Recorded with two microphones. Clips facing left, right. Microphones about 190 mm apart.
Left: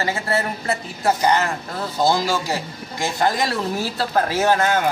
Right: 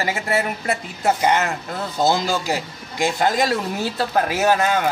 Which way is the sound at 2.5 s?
20° right (ahead or behind).